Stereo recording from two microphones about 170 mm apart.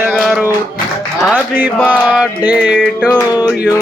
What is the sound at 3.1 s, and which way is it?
Music, 25° left (ahead or behind).